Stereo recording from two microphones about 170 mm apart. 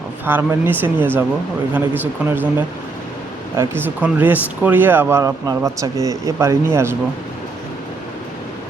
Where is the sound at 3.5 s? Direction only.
15° right (ahead or behind).